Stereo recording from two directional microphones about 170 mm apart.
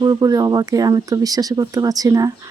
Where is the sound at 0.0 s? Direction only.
20° right (ahead or behind).